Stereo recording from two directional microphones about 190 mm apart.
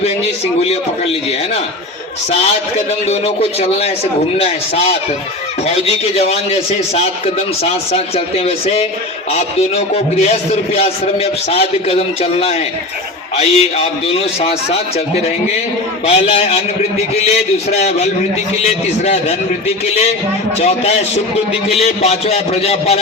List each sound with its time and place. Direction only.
3.6 s a man's voice: 35° left (ahead or behind)
16.0 s a man's voice: 30° left (ahead or behind)
20.6 s a man's voice: 35° left (ahead or behind)